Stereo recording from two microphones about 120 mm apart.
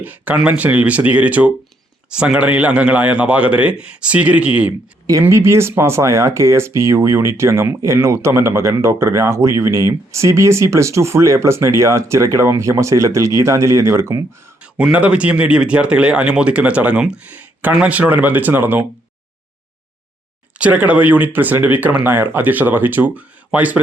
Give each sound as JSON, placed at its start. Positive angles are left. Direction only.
{"t": 0.0, "sound": "speech", "side_deg": -15}
{"t": 5.2, "sound": "speech", "side_deg": -20}
{"t": 14.6, "sound": "speech", "side_deg": -10}
{"t": 20.6, "sound": "speech", "side_deg": -10}